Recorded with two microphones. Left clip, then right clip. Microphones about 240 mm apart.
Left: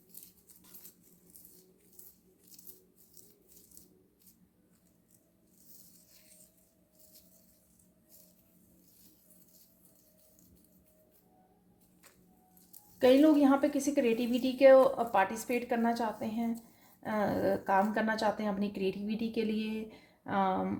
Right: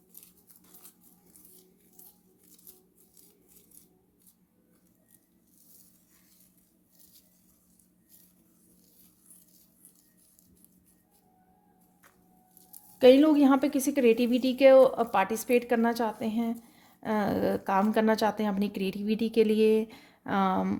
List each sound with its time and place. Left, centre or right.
13.0 s speech: right